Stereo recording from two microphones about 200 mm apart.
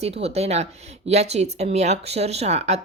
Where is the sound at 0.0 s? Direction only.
30° right (ahead or behind).